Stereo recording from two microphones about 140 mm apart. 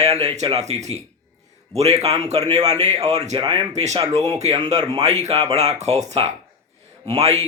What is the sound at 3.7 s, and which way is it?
Speech, 55° right (ahead or behind).